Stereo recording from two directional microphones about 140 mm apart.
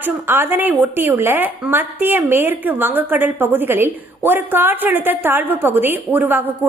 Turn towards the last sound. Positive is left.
turn(degrees=-15)  # may be behind; listen again after turning